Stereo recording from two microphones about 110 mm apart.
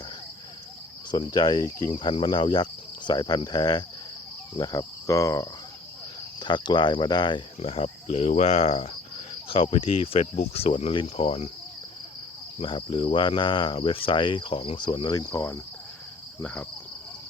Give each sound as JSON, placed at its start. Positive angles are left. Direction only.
{"t": 1.1, "sound": "cricket", "side_deg": 40}
{"t": 1.9, "sound": "cricket", "side_deg": 45}
{"t": 6.4, "sound": "cricket", "side_deg": 45}
{"t": 7.6, "sound": "speech", "side_deg": 65}
{"t": 12.5, "sound": "cricket", "side_deg": 50}
{"t": 16.4, "sound": "speech", "side_deg": 10}